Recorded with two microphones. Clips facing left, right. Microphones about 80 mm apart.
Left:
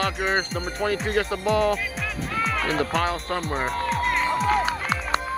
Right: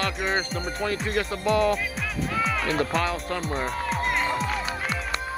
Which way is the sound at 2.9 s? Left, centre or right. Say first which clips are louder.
Left 2 dB; left.